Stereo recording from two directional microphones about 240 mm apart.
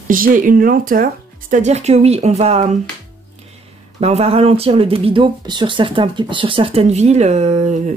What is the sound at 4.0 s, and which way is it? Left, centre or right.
Speech, right.